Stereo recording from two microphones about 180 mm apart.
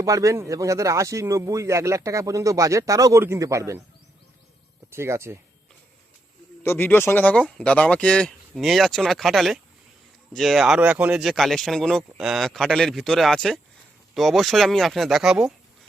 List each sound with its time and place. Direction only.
0.0 s speech: 20° right (ahead or behind)
4.9 s speech: 15° right (ahead or behind)
6.6 s speech: 10° left (ahead or behind); by 15.5 s 5° right (ahead or behind)